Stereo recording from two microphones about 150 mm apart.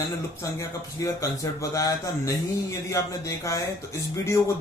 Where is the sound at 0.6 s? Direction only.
20° left (ahead or behind).